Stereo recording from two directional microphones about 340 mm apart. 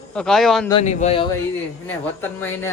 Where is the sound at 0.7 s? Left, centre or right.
Centre.